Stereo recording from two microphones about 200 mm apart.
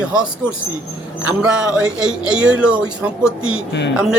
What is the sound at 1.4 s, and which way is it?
Speech, 5° right (ahead or behind).